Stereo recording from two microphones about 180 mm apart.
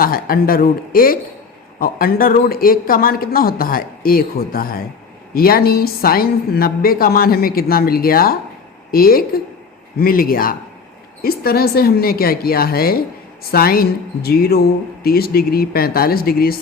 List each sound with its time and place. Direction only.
0.0 s a woman's voice: 55° left (ahead or behind)